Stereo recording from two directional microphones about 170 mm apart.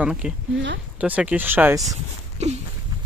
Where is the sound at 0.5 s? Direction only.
90° right.